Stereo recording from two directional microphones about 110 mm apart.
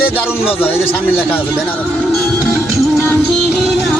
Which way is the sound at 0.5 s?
60° left (ahead or behind).